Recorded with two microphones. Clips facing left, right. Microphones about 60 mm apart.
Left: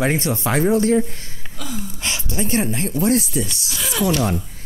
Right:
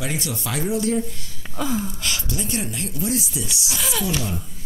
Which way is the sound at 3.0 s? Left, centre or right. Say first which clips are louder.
Left 7 dB; left.